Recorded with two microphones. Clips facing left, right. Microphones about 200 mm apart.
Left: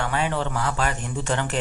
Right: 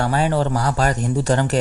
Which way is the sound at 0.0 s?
40° right (ahead or behind).